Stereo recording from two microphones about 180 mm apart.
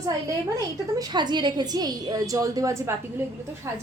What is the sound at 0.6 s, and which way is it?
A woman's voice, 20° right (ahead or behind).